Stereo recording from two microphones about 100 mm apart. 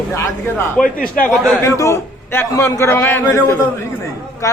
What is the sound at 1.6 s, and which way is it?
Speech, 30° left (ahead or behind).